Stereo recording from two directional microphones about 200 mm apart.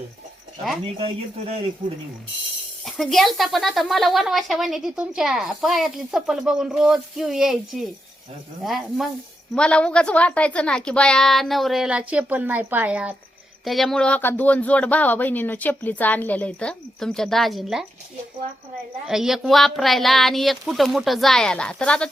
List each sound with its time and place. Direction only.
0.9 s speech: 30° right (ahead or behind)
2.8 s speech: centre (ahead or behind)
19.0 s speech: centre (ahead or behind)